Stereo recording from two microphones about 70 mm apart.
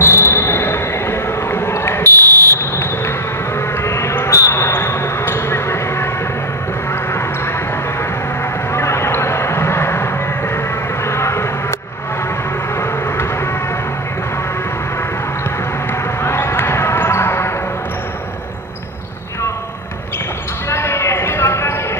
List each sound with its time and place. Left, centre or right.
0.0 s basketball bounce: left
8.7 s a sound: left
11.1 s vehicle: left
15.9 s basketball bounce: left
20.7 s basketball bounce: left